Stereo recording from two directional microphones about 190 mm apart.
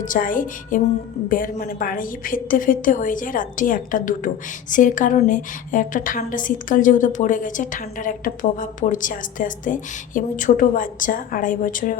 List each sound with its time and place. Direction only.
0.0 s a woman's voice: 45° left (ahead or behind)